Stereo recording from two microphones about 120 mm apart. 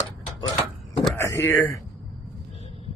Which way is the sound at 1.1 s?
20° left (ahead or behind).